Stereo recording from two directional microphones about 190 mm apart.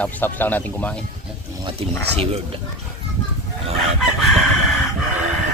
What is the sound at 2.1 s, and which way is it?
Speech, 30° right (ahead or behind).